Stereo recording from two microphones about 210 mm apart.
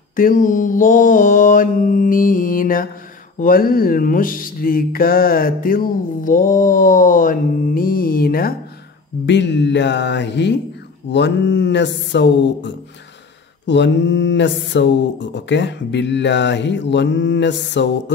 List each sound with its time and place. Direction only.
0.1 s mantra: 40° left (ahead or behind)
3.3 s a sound: 40° left (ahead or behind)
9.2 s mantra: 55° left (ahead or behind)